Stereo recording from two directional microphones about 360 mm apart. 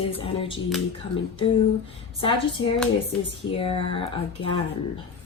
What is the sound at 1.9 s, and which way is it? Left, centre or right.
A woman's voice, centre.